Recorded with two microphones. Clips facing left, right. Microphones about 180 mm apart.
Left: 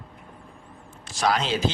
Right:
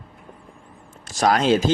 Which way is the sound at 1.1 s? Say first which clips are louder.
Right 6 dB; 45° right (ahead or behind).